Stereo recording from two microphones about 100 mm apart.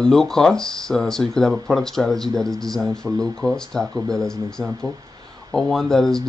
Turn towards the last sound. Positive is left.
turn(degrees=5)  # may be behind; listen again after turning